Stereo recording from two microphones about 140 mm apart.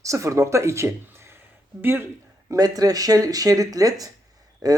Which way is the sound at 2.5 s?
25° right (ahead or behind).